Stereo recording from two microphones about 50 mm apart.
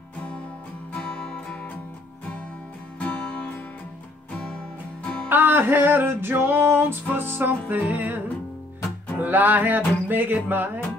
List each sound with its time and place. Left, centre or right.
0.9 s music: left
3.0 s music: left
5.3 s music: right
9.2 s music: right